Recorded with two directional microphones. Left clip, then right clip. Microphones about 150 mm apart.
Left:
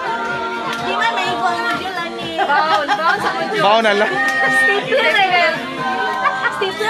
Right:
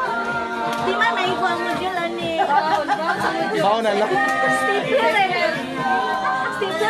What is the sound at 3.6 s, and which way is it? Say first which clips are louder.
Speech: left 7 dB; 15° left (ahead or behind).